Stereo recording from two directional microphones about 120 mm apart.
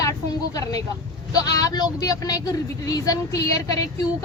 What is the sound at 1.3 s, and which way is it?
A woman's voice, 30° left (ahead or behind).